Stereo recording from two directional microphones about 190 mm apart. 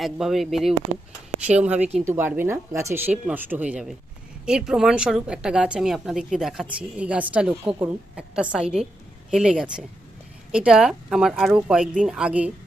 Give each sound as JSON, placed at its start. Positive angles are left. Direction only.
{"t": 0.0, "sound": "speech", "side_deg": 0}